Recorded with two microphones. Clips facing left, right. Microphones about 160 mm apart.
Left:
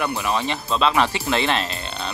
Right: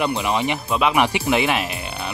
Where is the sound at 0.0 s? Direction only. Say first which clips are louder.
Right 2 dB; 20° right (ahead or behind).